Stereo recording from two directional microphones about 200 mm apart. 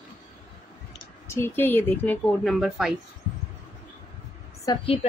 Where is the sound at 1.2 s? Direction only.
10° left (ahead or behind).